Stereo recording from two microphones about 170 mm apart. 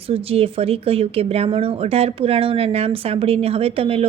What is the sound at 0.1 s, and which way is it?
Speech, 35° right (ahead or behind).